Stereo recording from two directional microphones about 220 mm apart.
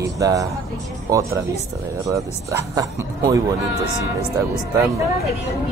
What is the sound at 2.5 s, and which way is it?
Speech, 15° right (ahead or behind).